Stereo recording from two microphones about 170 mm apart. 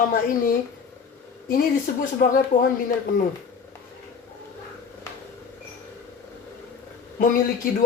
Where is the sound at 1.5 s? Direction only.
55° left (ahead or behind).